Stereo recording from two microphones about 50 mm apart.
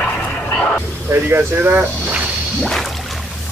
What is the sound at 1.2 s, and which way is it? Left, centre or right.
Speech, right.